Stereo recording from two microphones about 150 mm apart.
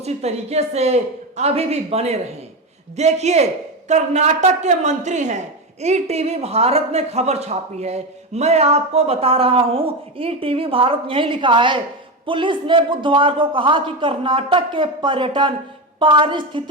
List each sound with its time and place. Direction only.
0.0 s a man's voice: 45° right (ahead or behind)